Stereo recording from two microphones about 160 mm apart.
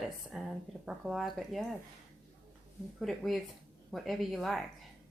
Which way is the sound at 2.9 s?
Centre (ahead or behind).